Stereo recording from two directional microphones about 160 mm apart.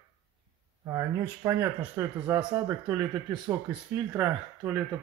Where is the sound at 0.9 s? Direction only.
15° right (ahead or behind).